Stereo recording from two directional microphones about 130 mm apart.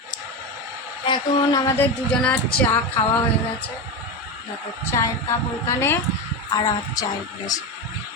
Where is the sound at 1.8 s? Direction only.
10° left (ahead or behind).